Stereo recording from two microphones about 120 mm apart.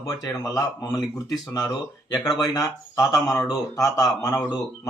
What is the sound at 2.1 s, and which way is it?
Speech, 30° left (ahead or behind).